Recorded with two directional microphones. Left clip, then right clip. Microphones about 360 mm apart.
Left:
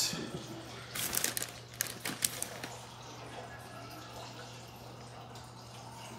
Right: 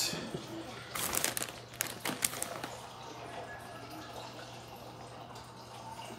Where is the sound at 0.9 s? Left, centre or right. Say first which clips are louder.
Right 1 dB; centre.